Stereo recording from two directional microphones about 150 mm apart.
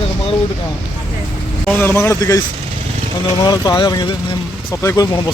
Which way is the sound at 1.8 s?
15° left (ahead or behind).